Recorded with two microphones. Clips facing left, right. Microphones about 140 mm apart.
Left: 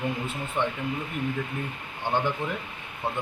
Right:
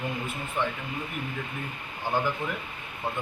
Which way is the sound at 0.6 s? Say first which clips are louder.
Left 2 dB; 25° left (ahead or behind).